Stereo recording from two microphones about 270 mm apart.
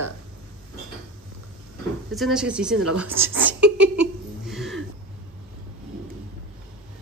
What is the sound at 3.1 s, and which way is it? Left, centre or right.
Speech, right.